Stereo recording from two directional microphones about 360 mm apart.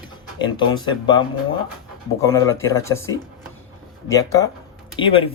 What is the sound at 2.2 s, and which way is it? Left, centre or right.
Speech, centre.